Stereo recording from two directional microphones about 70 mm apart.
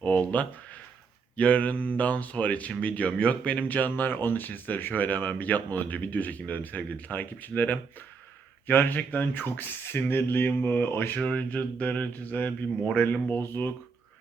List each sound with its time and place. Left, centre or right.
0.0 s speech: left
11.2 s speech: centre